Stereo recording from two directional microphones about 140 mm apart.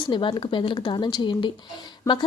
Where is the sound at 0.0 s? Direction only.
35° left (ahead or behind).